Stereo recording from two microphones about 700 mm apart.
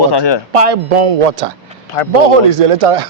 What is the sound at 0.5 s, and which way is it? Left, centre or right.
Speech, right.